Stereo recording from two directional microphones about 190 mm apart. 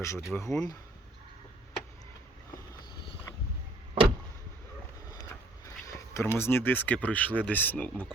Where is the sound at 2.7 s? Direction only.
25° left (ahead or behind).